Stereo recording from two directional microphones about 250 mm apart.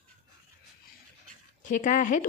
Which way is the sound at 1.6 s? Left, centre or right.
Left.